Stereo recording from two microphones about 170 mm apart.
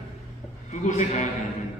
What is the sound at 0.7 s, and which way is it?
Speech, 45° left (ahead or behind).